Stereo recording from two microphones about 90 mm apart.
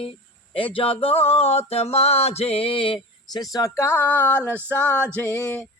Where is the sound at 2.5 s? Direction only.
85° left.